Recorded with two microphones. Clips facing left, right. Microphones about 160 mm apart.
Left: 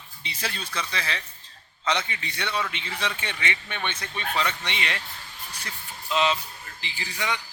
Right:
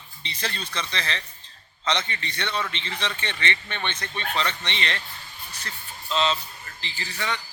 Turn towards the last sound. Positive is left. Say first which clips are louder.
# even
turn(degrees=10)  # may be behind; listen again after turning